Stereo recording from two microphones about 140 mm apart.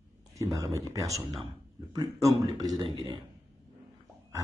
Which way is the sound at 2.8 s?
30° right (ahead or behind).